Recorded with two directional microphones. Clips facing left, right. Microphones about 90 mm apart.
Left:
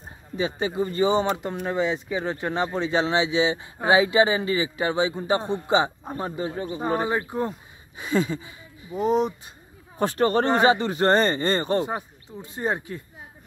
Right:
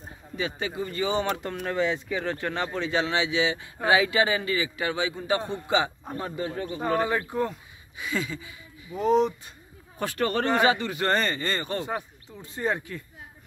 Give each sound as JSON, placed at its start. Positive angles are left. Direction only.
{"t": 0.4, "sound": "a man's voice", "side_deg": 25}
{"t": 8.0, "sound": "speech", "side_deg": 35}
{"t": 8.9, "sound": "speech", "side_deg": 15}
{"t": 9.9, "sound": "a man's voice", "side_deg": 30}